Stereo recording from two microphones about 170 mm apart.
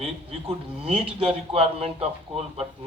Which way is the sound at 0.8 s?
35° right (ahead or behind).